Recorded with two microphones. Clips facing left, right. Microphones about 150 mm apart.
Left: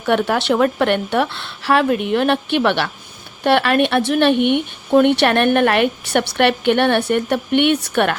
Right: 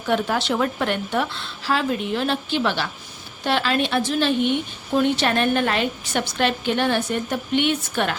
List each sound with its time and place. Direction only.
0.0 s a woman's voice: 65° left (ahead or behind)